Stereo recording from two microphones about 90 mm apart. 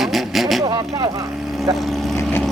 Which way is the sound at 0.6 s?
50° right (ahead or behind).